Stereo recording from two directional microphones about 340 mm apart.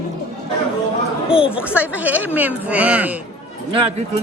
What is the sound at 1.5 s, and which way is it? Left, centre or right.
Speech, centre.